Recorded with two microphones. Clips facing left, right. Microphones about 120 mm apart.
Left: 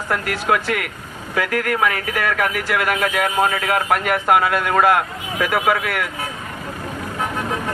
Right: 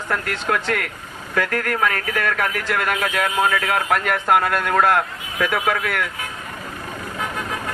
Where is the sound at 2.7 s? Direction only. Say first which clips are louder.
Left 2 dB; 75° left (ahead or behind).